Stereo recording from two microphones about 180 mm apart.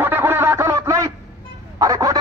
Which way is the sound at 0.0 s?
10° right (ahead or behind).